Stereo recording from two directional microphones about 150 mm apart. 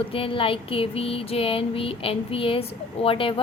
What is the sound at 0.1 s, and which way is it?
A woman's voice, 35° left (ahead or behind).